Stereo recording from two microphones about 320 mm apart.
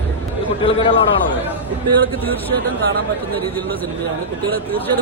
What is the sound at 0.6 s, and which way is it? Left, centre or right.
Speech, centre.